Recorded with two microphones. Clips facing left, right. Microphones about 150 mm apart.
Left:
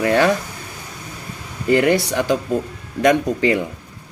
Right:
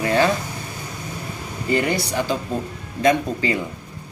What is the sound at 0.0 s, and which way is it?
Speech, 65° left (ahead or behind).